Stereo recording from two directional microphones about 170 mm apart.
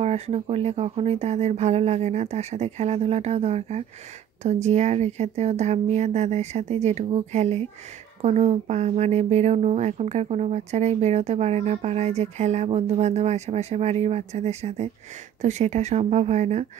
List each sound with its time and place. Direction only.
0.0 s speech: 40° right (ahead or behind)